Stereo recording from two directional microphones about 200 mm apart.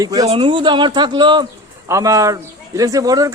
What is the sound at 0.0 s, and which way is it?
Speech, 20° right (ahead or behind).